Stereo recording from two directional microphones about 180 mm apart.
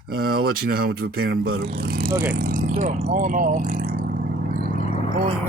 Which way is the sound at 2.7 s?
40° right (ahead or behind).